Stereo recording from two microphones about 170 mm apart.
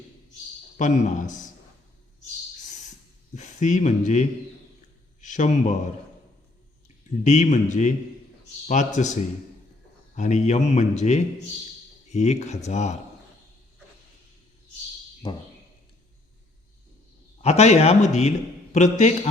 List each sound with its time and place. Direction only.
0.8 s speech: 45° left (ahead or behind)
3.3 s speech: 45° left (ahead or behind)
5.3 s speech: 45° left (ahead or behind)
6.8 s speech: 45° left (ahead or behind)
10.2 s speech: 45° left (ahead or behind)
15.2 s speech: 25° left (ahead or behind)
17.4 s a man's voice: 40° left (ahead or behind)